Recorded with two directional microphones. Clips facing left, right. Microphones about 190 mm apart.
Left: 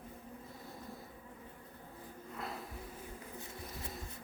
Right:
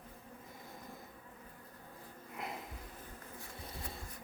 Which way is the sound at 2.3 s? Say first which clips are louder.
Even; 20° right (ahead or behind).